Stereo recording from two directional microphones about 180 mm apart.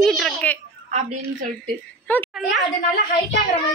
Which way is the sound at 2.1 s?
10° left (ahead or behind).